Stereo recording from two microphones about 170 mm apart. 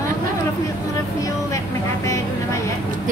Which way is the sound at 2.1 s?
20° left (ahead or behind).